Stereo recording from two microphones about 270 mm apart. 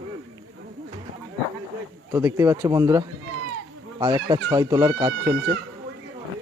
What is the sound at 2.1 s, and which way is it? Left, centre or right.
Speech, centre.